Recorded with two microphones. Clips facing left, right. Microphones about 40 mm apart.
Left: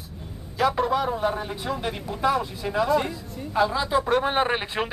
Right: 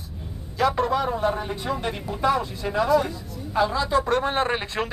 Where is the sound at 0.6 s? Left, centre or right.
Centre.